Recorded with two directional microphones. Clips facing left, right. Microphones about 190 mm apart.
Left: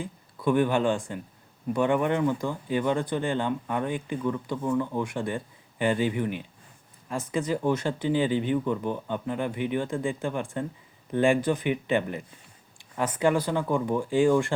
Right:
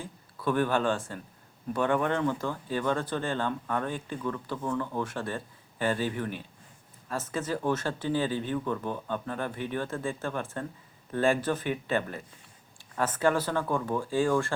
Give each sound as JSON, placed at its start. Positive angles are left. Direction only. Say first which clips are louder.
{"t": 0.0, "sound": "speech", "louder": "left 4 dB", "side_deg": 15}